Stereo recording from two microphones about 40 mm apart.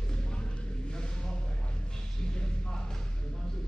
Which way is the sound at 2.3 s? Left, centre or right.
Centre.